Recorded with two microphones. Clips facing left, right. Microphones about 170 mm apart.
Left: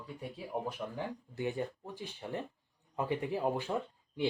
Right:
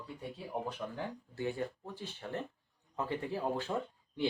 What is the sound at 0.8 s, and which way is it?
Speech, 10° left (ahead or behind).